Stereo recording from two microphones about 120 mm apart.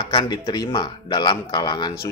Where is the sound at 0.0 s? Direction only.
35° left (ahead or behind).